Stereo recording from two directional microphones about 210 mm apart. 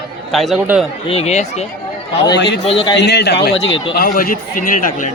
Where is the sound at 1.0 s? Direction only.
30° left (ahead or behind).